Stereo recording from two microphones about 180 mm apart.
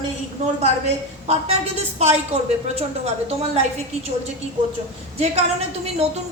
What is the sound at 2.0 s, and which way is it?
Speech, 35° right (ahead or behind).